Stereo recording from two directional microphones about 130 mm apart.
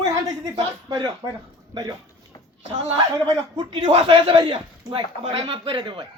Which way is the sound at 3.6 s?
40° right (ahead or behind).